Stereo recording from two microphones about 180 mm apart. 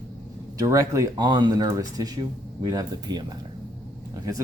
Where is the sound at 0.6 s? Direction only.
15° right (ahead or behind).